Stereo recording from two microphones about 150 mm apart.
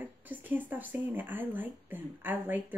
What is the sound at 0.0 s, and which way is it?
Speech, 10° right (ahead or behind).